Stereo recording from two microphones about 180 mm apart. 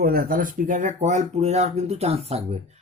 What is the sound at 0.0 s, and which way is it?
Speech, 55° right (ahead or behind).